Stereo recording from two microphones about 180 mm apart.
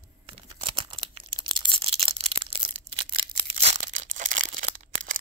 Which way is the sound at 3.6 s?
40° right (ahead or behind).